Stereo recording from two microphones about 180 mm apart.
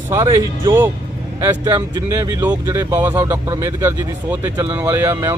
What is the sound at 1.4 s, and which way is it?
Speech, 15° right (ahead or behind).